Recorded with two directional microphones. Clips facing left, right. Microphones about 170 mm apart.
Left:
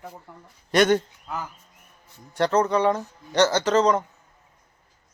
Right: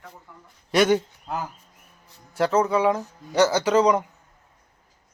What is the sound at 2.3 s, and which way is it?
Speech, 5° right (ahead or behind).